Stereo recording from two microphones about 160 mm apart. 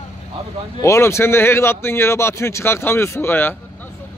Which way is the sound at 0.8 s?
15° left (ahead or behind).